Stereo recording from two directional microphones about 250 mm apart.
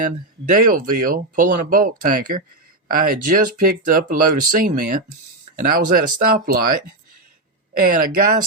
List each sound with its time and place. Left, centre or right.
0.5 s speech: right